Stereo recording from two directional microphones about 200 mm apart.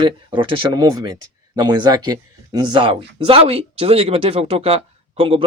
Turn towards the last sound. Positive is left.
turn(degrees=-30)  # may be behind; listen again after turning